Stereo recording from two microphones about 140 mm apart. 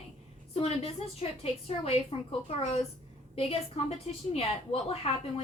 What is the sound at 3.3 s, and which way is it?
A woman's voice, 45° left (ahead or behind).